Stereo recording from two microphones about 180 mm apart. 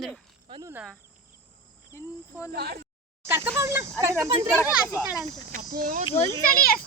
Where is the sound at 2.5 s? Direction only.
65° right (ahead or behind).